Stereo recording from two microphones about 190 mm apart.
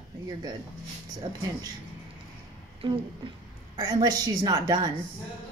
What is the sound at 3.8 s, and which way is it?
A woman's voice, 20° right (ahead or behind).